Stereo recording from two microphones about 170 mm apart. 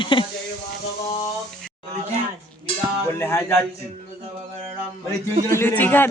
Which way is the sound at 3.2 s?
15° left (ahead or behind).